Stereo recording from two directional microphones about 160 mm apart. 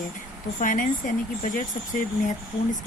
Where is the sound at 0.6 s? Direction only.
55° left (ahead or behind).